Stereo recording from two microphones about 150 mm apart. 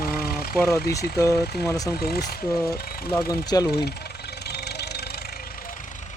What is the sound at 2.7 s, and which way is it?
Speech, 90° left.